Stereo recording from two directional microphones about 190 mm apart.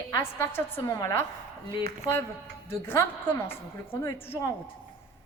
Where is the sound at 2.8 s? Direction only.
10° left (ahead or behind).